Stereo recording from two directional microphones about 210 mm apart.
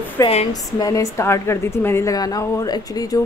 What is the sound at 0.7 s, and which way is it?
A woman's voice, 15° left (ahead or behind).